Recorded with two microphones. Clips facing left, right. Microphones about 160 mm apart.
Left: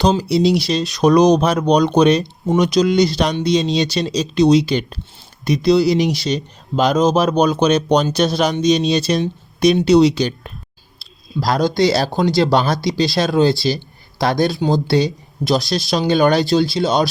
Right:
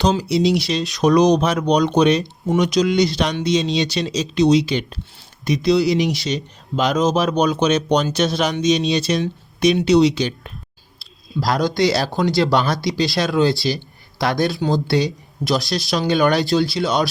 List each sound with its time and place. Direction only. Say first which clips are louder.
0.0 s speech: left 2 dB; 30° left (ahead or behind)
11.3 s speech: left 2 dB; 30° left (ahead or behind)